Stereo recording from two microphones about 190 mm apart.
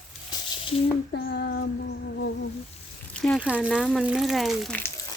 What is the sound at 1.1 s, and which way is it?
Child singing, 60° left (ahead or behind).